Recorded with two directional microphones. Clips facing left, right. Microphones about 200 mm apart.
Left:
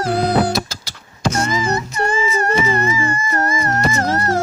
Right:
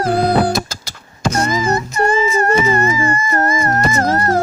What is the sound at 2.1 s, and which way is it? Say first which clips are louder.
Music: right 3 dB; 45° right (ahead or behind).